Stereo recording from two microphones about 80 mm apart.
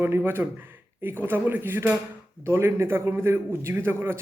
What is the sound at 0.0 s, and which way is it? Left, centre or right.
A man's voice, right.